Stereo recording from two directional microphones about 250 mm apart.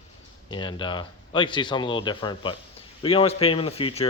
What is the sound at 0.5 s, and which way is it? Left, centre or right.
Speech, centre.